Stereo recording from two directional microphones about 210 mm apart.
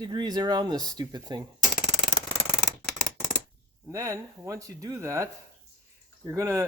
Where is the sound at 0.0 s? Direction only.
20° right (ahead or behind).